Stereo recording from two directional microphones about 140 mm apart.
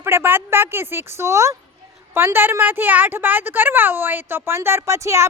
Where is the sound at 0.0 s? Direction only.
15° right (ahead or behind).